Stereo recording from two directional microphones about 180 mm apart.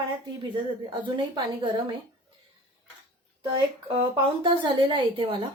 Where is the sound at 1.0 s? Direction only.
25° right (ahead or behind).